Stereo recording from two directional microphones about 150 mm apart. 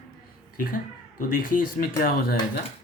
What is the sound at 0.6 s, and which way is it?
Speech, 70° left (ahead or behind).